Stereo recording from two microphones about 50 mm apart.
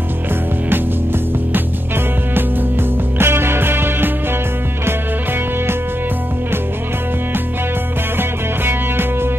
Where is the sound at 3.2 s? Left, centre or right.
Right.